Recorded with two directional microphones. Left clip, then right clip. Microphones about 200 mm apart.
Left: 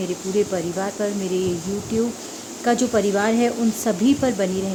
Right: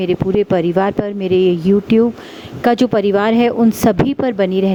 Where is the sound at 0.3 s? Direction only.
45° right (ahead or behind).